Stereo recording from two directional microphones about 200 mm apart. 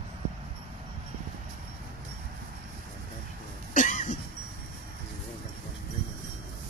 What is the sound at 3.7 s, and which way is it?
Cough, 40° left (ahead or behind).